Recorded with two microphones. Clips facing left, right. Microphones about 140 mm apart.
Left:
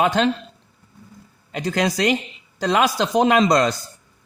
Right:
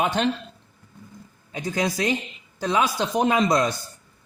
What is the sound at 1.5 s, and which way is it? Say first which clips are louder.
A woman's voice: left 4 dB; 80° left.